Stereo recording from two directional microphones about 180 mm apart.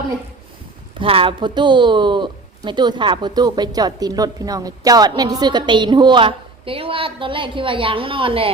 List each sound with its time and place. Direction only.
0.9 s speech: 30° right (ahead or behind)